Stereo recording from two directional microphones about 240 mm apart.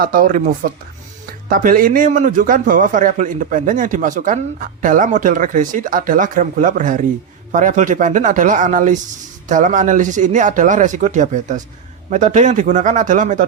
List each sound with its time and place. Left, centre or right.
0.0 s a man's voice: right